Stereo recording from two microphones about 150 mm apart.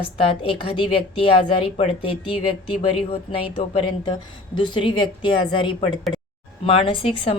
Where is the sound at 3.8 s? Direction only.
35° left (ahead or behind).